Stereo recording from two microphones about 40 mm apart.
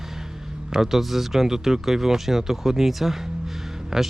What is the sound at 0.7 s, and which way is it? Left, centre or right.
Speech, centre.